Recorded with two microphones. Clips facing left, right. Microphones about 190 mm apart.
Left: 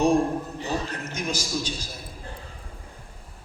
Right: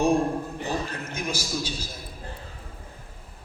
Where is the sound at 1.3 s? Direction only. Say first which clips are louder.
Left 1 dB; 10° right (ahead or behind).